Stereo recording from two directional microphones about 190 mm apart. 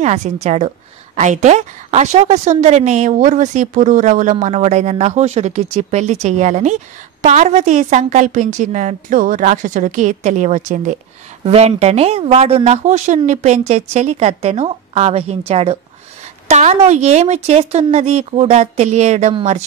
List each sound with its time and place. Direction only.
0.0 s a woman's voice: 35° right (ahead or behind)